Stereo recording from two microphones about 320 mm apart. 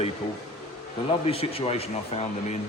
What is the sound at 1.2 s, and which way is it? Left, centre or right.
Speech, centre.